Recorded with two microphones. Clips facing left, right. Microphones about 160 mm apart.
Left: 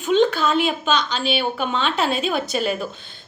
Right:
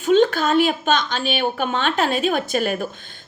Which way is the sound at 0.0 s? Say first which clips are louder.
Right 2 dB; 45° right (ahead or behind).